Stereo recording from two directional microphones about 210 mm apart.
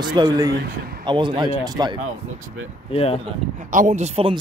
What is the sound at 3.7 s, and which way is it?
Speech, 35° right (ahead or behind).